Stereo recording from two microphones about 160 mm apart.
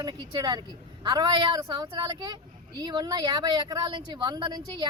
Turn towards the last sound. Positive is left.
turn(degrees=-25)  # may be behind; listen again after turning